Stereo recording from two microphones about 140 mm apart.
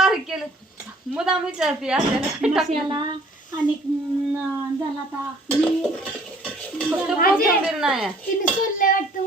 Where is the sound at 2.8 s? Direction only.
35° right (ahead or behind).